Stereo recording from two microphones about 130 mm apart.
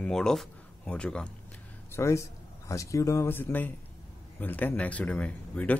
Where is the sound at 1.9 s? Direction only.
20° left (ahead or behind).